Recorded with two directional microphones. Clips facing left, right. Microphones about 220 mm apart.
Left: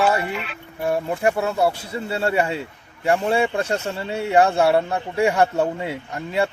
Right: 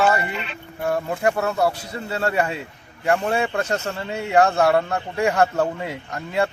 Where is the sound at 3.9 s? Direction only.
30° left (ahead or behind).